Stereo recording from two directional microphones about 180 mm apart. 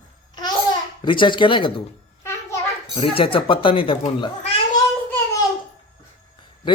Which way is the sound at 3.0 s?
30° left (ahead or behind).